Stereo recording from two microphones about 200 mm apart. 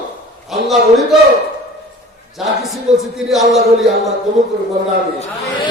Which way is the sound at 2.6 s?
Centre (ahead or behind).